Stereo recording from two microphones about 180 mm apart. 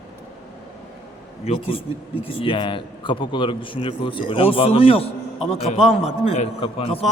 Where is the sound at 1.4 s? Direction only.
30° left (ahead or behind).